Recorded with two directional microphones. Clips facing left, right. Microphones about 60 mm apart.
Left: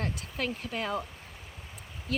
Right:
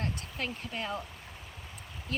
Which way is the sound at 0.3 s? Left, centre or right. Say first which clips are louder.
Left 6 dB; left.